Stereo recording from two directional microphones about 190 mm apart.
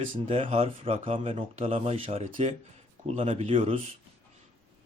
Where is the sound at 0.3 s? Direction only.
30° right (ahead or behind).